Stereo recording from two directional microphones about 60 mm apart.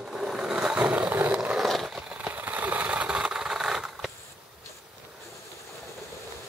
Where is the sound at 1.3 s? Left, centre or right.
Centre.